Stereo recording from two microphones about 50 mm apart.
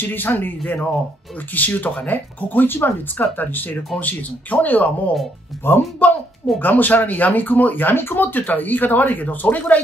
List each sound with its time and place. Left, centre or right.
0.0 s speech: left
5.6 s speech: left
6.6 s speech: left